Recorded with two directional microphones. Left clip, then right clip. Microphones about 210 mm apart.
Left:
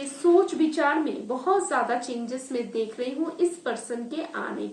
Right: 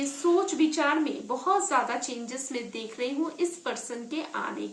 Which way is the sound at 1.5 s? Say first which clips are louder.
Left 2 dB; 40° right (ahead or behind).